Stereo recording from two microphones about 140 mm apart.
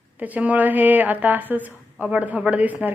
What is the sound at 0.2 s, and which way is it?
A woman's voice, 10° right (ahead or behind).